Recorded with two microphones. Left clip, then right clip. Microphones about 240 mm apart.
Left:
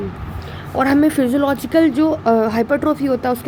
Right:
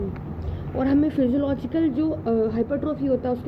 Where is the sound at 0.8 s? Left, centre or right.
Left.